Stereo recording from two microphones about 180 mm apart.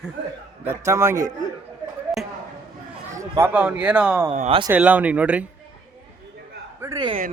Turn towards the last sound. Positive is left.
turn(degrees=-25)  # may be behind; listen again after turning